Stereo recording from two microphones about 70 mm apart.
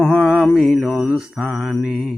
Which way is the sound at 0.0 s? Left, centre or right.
Centre.